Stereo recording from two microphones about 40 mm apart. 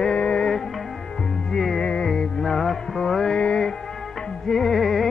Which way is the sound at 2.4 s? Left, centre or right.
Centre.